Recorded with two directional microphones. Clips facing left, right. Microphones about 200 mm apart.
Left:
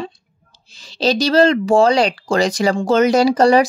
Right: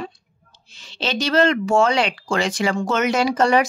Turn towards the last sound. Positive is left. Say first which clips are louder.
# left 5 dB
turn(degrees=35)  # may be behind; listen again after turning